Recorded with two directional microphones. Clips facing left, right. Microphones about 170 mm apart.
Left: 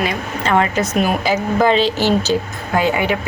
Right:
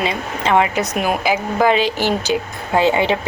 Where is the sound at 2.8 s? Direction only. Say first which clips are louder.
Right 2 dB; 25° right (ahead or behind).